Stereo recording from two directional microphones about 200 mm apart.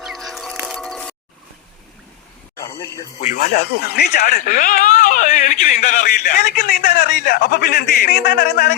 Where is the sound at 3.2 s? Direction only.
40° left (ahead or behind).